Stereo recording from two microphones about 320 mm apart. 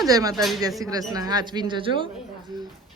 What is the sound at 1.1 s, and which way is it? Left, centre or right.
Speech, centre.